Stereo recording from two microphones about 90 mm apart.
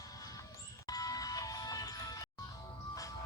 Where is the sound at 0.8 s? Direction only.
45° left (ahead or behind).